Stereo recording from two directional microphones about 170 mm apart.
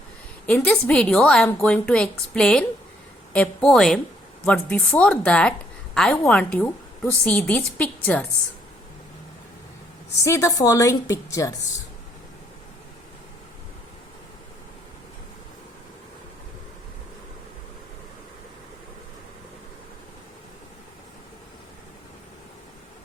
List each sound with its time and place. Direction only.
0.4 s a woman's voice: 5° left (ahead or behind)
10.2 s a woman's voice: 15° left (ahead or behind)